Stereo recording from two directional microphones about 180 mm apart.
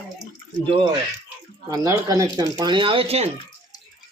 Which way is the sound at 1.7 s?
20° right (ahead or behind).